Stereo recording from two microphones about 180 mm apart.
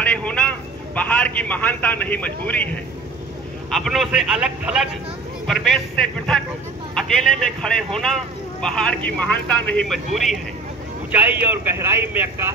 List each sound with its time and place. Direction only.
0.0 s a man's voice: 5° left (ahead or behind)
7.6 s speech: 5° left (ahead or behind)